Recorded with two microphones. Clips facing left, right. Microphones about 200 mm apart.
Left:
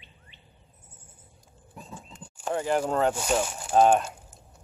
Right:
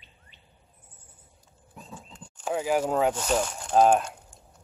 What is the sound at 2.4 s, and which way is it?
Speech, 5° right (ahead or behind).